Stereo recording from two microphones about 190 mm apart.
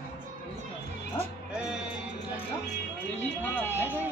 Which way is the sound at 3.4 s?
10° left (ahead or behind).